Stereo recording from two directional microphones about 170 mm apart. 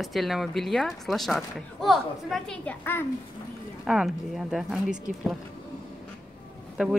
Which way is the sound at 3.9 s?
Centre (ahead or behind).